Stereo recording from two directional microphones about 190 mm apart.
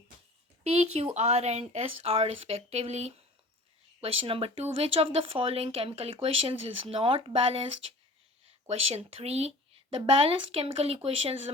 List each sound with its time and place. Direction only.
0.6 s speech: 35° right (ahead or behind)
8.6 s speech: 30° right (ahead or behind)